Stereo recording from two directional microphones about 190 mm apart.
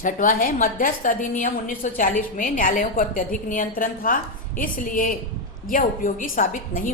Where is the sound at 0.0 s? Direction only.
45° left (ahead or behind).